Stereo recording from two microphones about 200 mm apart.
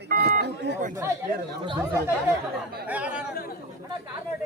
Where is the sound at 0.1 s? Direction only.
50° right (ahead or behind).